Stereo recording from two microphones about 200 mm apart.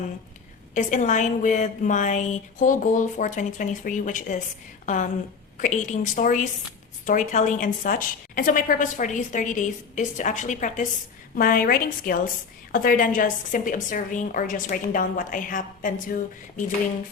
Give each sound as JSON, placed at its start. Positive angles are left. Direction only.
{"t": 0.7, "sound": "a woman's voice", "side_deg": 35}
{"t": 5.5, "sound": "a woman's voice", "side_deg": 40}